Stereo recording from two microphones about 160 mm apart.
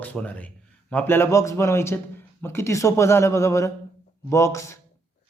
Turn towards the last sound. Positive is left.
turn(degrees=20)  # may be behind; listen again after turning